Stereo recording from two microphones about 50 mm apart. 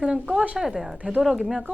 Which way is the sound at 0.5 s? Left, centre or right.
Centre.